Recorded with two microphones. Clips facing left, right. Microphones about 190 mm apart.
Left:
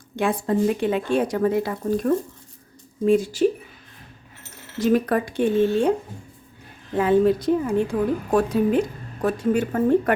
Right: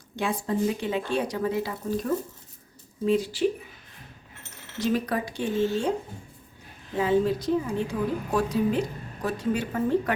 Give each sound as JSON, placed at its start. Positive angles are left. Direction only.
{"t": 0.2, "sound": "speech", "side_deg": 55}
{"t": 4.8, "sound": "speech", "side_deg": 50}
{"t": 6.9, "sound": "speech", "side_deg": 55}